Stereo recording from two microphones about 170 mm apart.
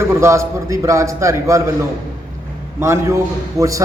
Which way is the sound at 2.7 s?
15° right (ahead or behind).